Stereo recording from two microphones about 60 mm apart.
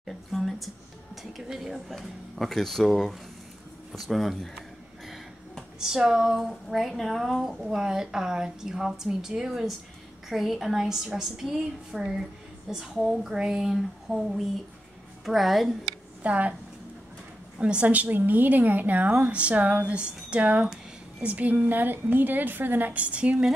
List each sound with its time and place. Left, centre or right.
0.3 s a sound: centre
1.1 s speech: centre
4.1 s a sound: centre
5.8 s a woman's voice: centre
16.2 s speech: right
17.6 s a woman's voice: centre